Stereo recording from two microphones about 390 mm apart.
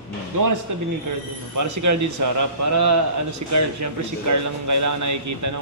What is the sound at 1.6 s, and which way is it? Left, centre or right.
A man's voice, right.